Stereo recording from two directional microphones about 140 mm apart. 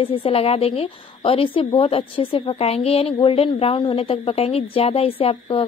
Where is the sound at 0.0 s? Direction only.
40° left (ahead or behind).